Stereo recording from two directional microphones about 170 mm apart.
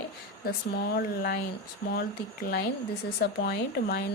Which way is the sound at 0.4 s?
65° left (ahead or behind).